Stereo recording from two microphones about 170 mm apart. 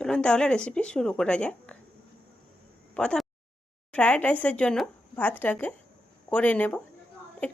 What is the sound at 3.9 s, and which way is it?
Speech, 5° left (ahead or behind).